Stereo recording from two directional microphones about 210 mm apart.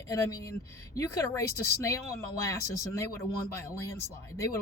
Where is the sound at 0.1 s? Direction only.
15° left (ahead or behind).